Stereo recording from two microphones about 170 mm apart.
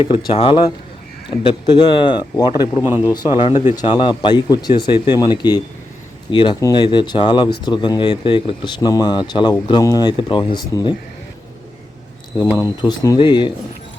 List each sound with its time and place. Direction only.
0.3 s speech: 30° left (ahead or behind)
12.4 s speech: 20° left (ahead or behind)